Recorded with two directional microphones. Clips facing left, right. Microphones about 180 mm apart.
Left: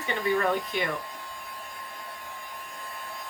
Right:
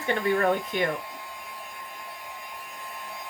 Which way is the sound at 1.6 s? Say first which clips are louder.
Even; 15° right (ahead or behind).